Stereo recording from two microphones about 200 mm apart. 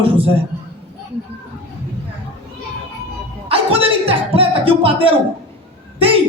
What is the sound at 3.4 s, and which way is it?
Music, 30° right (ahead or behind).